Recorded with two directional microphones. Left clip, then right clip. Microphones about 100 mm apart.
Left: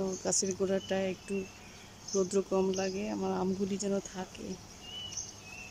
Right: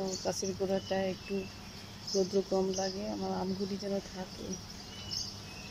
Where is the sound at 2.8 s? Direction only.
15° left (ahead or behind).